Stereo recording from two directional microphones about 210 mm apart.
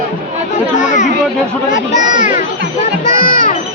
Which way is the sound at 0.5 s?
35° left (ahead or behind).